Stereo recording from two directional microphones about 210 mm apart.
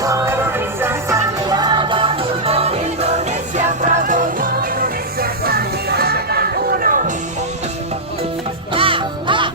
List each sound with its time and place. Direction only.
0.0 s music: 15° right (ahead or behind); by 7.0 s 40° right (ahead or behind)
8.7 s music: 25° right (ahead or behind)